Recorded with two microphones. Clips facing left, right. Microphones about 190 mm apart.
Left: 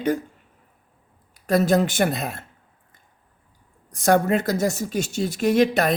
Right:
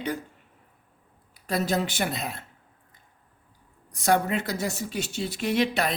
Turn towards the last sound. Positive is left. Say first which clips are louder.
# left 6 dB
turn(degrees=45)  # may be behind; listen again after turning